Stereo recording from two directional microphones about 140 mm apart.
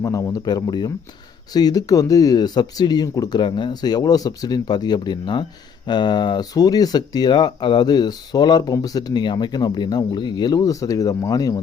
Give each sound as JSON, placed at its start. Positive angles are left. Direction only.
{"t": 0.0, "sound": "speech", "side_deg": 25}